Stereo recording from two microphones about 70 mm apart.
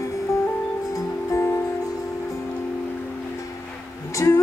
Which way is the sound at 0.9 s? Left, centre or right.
Left.